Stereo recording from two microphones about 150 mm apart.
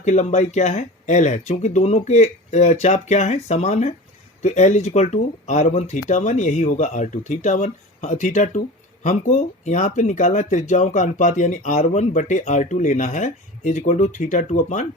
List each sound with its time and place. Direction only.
0.0 s speech: 50° left (ahead or behind)